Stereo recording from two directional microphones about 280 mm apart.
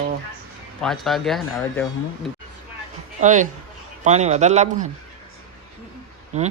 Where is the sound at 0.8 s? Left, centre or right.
Centre.